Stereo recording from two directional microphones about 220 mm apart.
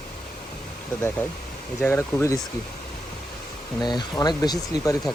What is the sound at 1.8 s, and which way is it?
Speech, 10° left (ahead or behind).